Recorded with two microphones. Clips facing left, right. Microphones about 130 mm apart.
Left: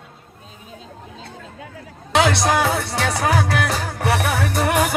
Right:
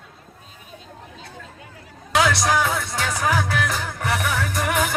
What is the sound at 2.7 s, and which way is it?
Music, 70° left (ahead or behind).